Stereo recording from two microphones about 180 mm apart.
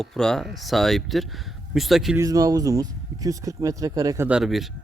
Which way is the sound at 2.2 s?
20° right (ahead or behind).